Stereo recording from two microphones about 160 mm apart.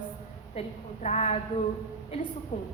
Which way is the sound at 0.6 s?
45° left (ahead or behind).